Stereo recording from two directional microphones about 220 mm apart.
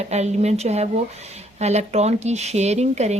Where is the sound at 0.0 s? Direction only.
30° right (ahead or behind).